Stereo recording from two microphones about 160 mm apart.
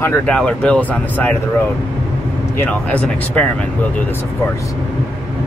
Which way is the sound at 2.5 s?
10° left (ahead or behind).